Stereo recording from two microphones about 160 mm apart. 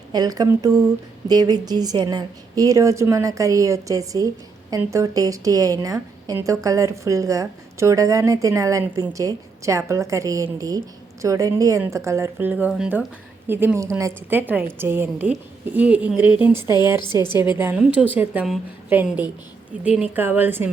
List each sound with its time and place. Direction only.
0.1 s a woman's voice: 25° right (ahead or behind)